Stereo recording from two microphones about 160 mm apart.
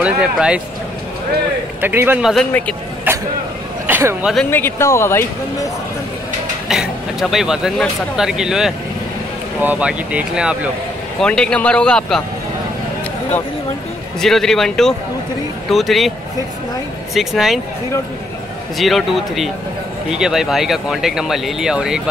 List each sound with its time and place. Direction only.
0.0 s speech: 5° right (ahead or behind)
1.8 s speech: 10° right (ahead or behind)
2.3 s speech: 10° left (ahead or behind)
3.1 s a man's voice: 15° right (ahead or behind)
4.5 s speech: 15° left (ahead or behind)
6.7 s speech: centre (ahead or behind)
11.1 s speech: 5° left (ahead or behind)
14.2 s speech: centre (ahead or behind)
17.1 s speech: centre (ahead or behind)
18.8 s speech: centre (ahead or behind)